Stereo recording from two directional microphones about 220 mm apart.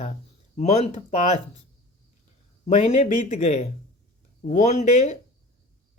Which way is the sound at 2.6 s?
30° left (ahead or behind).